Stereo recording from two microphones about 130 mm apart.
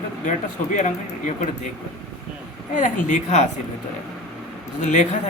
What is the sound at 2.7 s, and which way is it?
Speech, 80° left.